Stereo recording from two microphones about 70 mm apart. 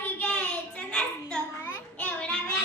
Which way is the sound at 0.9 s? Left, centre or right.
Centre.